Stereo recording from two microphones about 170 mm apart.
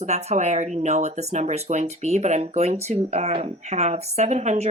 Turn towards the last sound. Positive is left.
turn(degrees=-40)  # may be behind; listen again after turning